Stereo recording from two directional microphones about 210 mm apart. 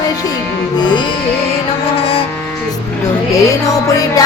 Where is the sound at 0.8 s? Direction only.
20° left (ahead or behind).